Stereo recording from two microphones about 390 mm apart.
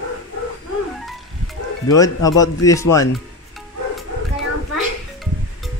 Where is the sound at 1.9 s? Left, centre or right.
Centre.